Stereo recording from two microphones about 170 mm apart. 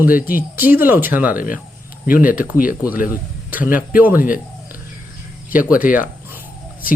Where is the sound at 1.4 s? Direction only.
55° left (ahead or behind).